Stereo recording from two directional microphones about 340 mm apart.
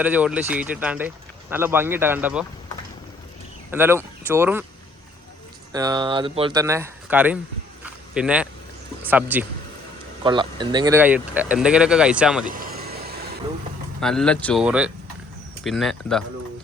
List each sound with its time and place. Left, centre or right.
0.0 s speech: centre
3.7 s speech: centre
5.7 s speech: centre
12.5 s vehicle: right
14.0 s speech: centre